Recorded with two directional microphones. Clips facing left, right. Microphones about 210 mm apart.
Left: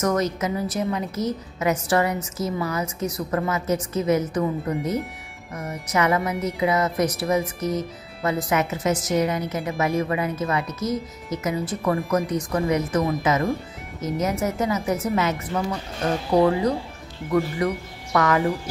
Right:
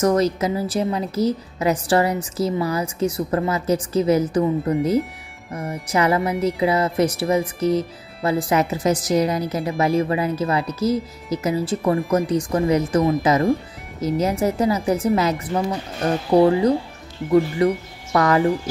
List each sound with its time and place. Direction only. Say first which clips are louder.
0.0 s speech: right 4 dB; 30° right (ahead or behind)
5.5 s speech: right 3 dB; 30° right (ahead or behind)